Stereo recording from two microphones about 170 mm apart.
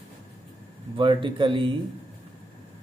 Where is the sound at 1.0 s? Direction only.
30° right (ahead or behind).